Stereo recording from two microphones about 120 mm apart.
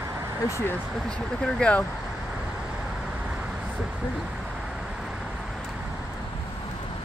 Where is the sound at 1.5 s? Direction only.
10° left (ahead or behind).